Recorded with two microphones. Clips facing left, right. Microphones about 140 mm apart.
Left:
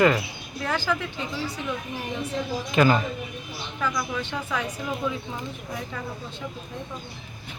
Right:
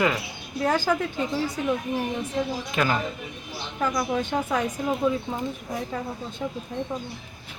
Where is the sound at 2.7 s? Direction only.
Centre (ahead or behind).